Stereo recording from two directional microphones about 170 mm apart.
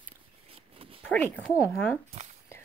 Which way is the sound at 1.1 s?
10° left (ahead or behind).